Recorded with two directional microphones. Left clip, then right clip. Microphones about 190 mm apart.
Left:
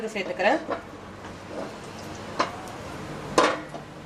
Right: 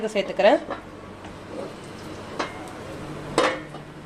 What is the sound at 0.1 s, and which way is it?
Speech, 45° right (ahead or behind).